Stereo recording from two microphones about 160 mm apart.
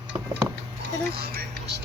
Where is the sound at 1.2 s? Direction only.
75° right (ahead or behind).